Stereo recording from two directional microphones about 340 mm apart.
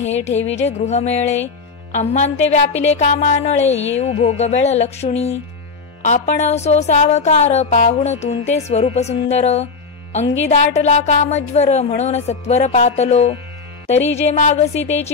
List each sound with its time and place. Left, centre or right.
0.0 s speech: centre